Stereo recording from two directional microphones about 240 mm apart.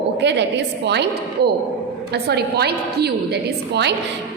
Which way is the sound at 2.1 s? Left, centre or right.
Right.